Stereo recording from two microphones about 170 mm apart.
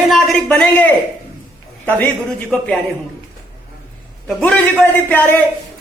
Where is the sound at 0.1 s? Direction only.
5° left (ahead or behind).